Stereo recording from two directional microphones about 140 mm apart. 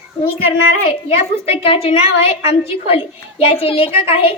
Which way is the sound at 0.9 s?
40° left (ahead or behind).